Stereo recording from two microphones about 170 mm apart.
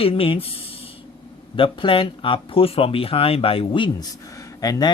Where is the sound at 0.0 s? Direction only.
35° left (ahead or behind).